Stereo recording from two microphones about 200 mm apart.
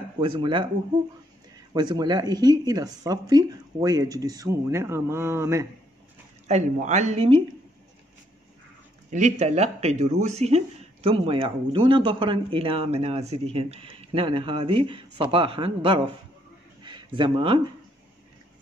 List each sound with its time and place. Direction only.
0.2 s speech: 25° right (ahead or behind)
1.7 s speech: 20° right (ahead or behind)
6.4 s speech: 35° right (ahead or behind)
9.1 s speech: 35° right (ahead or behind)
16.8 s a sound: 25° right (ahead or behind)